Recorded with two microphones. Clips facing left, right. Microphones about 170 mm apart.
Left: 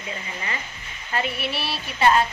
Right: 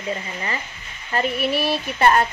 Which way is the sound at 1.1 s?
45° right (ahead or behind).